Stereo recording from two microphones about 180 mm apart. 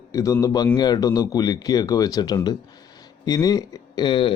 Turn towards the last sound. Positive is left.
turn(degrees=25)  # may be behind; listen again after turning